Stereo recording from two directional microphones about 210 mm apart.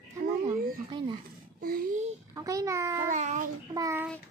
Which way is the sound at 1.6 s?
40° right (ahead or behind).